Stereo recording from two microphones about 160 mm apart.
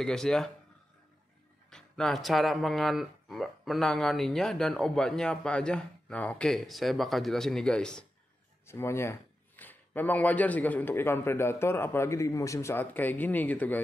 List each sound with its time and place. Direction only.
0.0 s speech: 5° left (ahead or behind)
1.7 s speech: 5° left (ahead or behind)
8.6 s a man's voice: 15° left (ahead or behind)